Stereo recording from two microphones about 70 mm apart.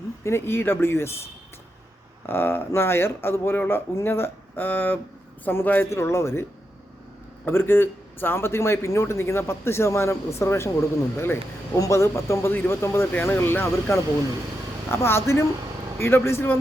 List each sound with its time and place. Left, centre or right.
0.3 s a man's voice: left
2.2 s a man's voice: left
5.9 s a man's voice: left
7.4 s a man's voice: left